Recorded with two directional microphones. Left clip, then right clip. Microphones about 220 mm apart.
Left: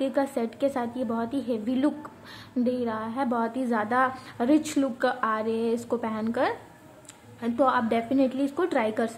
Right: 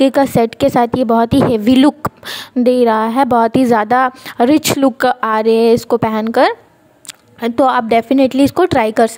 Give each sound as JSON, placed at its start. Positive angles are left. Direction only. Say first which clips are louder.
{"t": 0.0, "sound": "a woman's voice", "louder": "right 15 dB", "side_deg": -40}